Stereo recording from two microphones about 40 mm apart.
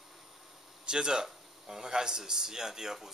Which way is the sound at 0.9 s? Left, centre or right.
Centre.